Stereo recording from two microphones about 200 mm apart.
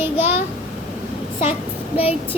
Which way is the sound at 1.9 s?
30° left (ahead or behind).